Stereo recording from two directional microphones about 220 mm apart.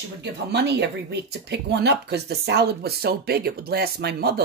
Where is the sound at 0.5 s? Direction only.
50° right (ahead or behind).